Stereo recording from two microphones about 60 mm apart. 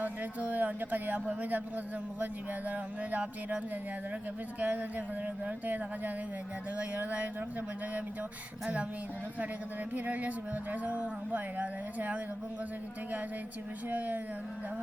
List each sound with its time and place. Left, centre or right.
0.0 s speech: right
4.6 s speech: right
9.9 s speech: right
13.9 s speech: right